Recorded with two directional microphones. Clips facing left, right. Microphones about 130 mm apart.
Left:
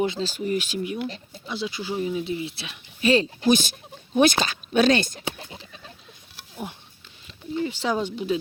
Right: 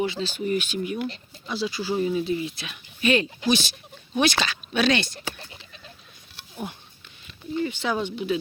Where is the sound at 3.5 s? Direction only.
45° left (ahead or behind).